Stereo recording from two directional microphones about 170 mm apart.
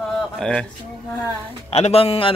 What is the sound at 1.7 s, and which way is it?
Speech, 35° left (ahead or behind).